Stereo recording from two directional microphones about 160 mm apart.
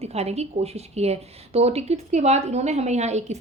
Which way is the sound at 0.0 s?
40° right (ahead or behind).